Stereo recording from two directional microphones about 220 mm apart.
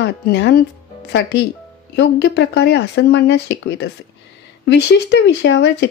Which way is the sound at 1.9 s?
50° left (ahead or behind).